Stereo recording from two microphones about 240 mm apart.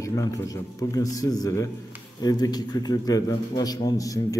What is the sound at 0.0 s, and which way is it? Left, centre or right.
A man's voice, centre.